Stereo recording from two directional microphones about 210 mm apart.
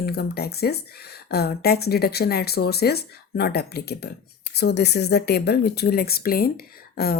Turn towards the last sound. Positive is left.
turn(degrees=45)  # may be behind; listen again after turning